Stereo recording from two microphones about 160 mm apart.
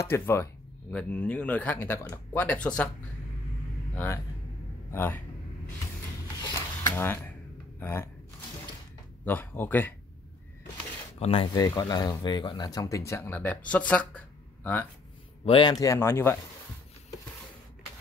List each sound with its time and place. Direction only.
0.0 s speech: 15° left (ahead or behind)
3.9 s speech: 15° left (ahead or behind)
6.4 s a sound: 15° left (ahead or behind)
7.8 s speech: 15° left (ahead or behind)
9.2 s speech: 10° left (ahead or behind)
11.1 s speech: 35° left (ahead or behind); by 14.9 s 10° left (ahead or behind)
15.4 s a man's voice: 35° left (ahead or behind)
15.7 s speech: 20° left (ahead or behind)